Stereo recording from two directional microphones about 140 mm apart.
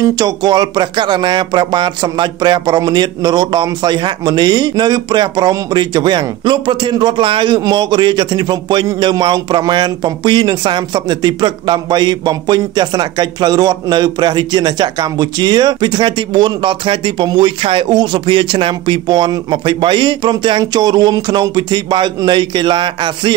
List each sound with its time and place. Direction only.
0.0 s speech: 30° right (ahead or behind)